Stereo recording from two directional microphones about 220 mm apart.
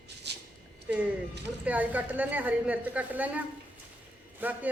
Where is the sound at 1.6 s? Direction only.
5° right (ahead or behind).